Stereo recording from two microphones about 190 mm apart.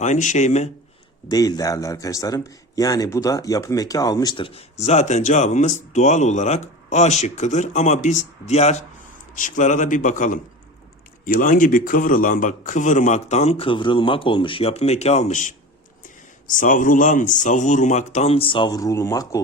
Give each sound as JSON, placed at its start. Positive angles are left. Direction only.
{"t": 0.0, "sound": "a man's voice", "side_deg": 40}
{"t": 1.3, "sound": "a man's voice", "side_deg": 20}